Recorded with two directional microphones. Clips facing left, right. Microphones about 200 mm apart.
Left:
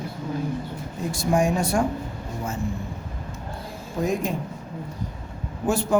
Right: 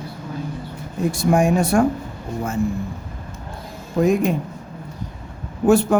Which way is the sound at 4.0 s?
65° right (ahead or behind).